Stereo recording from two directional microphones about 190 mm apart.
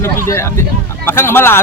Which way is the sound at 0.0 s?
15° left (ahead or behind).